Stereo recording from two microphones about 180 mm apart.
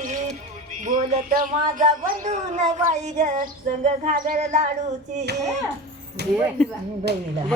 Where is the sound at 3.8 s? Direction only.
45° right (ahead or behind).